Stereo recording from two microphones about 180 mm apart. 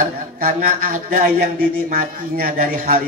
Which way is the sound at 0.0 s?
50° right (ahead or behind).